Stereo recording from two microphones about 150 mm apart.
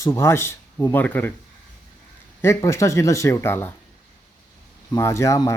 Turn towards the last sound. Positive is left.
turn(degrees=20)  # may be behind; listen again after turning